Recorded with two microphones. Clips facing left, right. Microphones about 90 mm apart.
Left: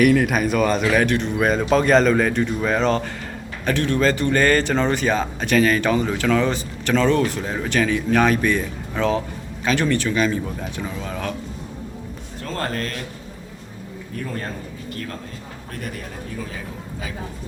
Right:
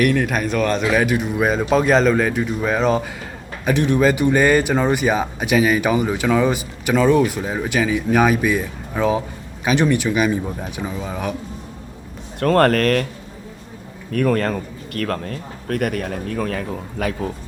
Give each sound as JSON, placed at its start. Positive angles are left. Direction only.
{"t": 0.0, "sound": "a man's voice", "side_deg": 0}
{"t": 12.4, "sound": "speech", "side_deg": -65}
{"t": 14.1, "sound": "a man's voice", "side_deg": -75}